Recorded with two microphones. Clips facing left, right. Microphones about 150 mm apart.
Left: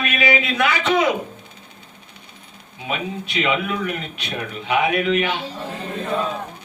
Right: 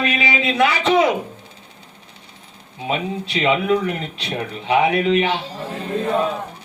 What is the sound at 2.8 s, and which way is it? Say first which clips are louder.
Speech: right 3 dB; 30° right (ahead or behind).